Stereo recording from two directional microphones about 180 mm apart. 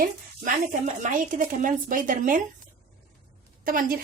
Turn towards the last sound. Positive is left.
turn(degrees=-50)  # may be behind; listen again after turning